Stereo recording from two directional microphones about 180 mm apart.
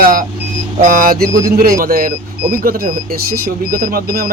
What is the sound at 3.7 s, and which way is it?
Speech, 55° right (ahead or behind).